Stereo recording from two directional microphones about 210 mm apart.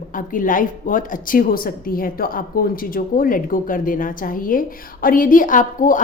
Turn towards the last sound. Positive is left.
turn(degrees=40)  # may be behind; listen again after turning